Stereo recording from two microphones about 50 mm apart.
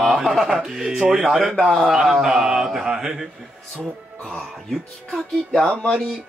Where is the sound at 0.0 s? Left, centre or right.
Centre.